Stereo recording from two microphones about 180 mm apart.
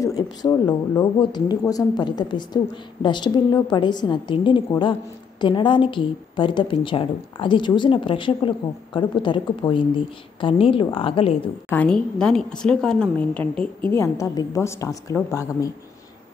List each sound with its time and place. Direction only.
0.0 s a woman's voice: 20° left (ahead or behind)
11.7 s a woman's voice: 5° left (ahead or behind)